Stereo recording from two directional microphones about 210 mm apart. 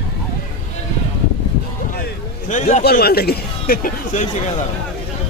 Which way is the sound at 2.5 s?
35° left (ahead or behind).